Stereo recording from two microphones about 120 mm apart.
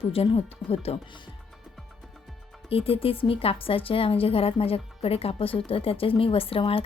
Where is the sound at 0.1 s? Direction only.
55° left (ahead or behind).